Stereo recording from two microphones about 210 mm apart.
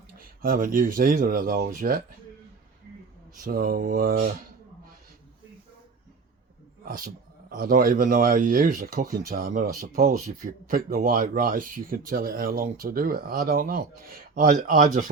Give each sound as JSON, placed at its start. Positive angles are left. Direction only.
{"t": 0.4, "sound": "speech", "side_deg": -40}
{"t": 3.3, "sound": "speech", "side_deg": -45}
{"t": 6.8, "sound": "a man's voice", "side_deg": -45}